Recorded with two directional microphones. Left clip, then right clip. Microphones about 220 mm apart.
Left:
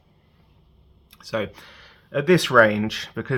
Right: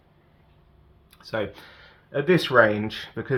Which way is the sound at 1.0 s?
20° left (ahead or behind).